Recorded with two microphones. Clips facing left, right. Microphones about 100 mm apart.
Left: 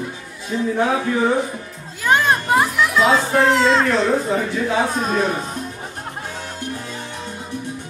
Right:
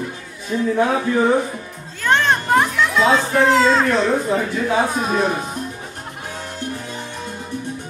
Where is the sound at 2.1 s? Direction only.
5° left (ahead or behind).